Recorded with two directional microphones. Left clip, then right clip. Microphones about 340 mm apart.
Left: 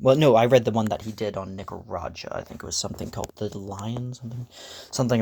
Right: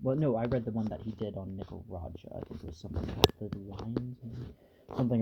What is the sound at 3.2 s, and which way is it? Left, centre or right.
Speech, left.